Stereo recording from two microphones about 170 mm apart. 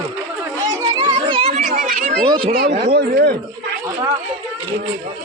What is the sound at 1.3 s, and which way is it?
Children playing, 35° right (ahead or behind).